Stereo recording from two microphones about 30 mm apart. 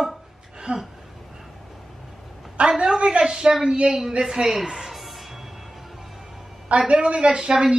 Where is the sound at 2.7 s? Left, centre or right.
Right.